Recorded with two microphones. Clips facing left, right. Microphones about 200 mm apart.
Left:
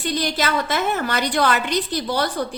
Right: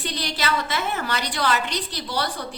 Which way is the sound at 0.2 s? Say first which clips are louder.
Left 2 dB; 50° left (ahead or behind).